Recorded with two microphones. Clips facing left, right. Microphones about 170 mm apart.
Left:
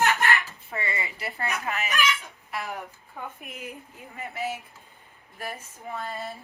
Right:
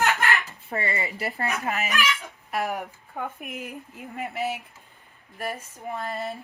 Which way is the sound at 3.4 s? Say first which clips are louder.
Right 3 dB; centre (ahead or behind).